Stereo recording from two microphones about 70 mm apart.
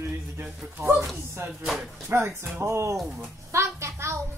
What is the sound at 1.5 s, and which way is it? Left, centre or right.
Speech, centre.